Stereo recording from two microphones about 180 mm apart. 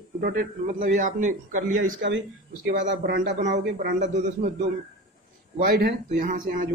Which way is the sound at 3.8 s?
45° right (ahead or behind).